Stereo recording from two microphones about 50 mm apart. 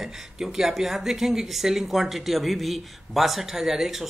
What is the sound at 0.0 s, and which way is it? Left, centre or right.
Speech, centre.